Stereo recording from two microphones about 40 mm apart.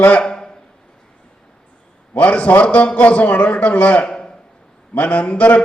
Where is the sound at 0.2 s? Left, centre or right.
Centre.